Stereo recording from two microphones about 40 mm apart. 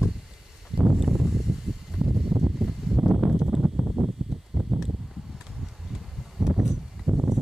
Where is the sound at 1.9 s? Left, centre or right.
Right.